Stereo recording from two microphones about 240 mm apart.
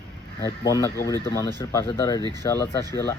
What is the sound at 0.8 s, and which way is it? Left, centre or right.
Speech, centre.